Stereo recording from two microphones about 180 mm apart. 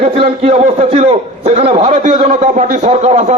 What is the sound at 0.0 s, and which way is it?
A man's voice, 35° right (ahead or behind).